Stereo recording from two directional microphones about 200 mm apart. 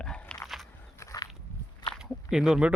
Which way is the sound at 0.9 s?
15° left (ahead or behind).